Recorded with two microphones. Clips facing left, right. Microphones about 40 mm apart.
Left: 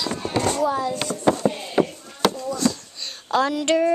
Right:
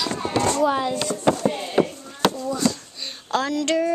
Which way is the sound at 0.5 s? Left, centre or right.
Right.